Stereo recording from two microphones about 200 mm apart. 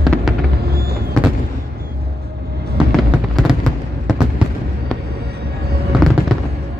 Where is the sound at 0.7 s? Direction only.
55° right (ahead or behind).